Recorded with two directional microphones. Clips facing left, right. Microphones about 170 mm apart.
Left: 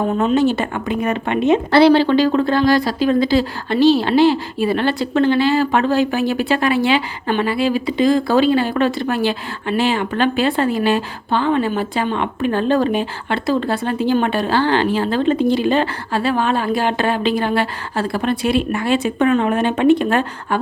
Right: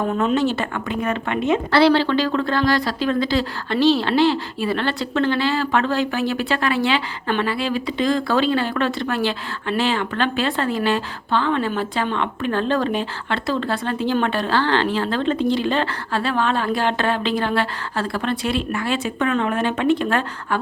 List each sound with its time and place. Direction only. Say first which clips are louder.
0.3 s a woman's voice: left 4 dB; 15° left (ahead or behind)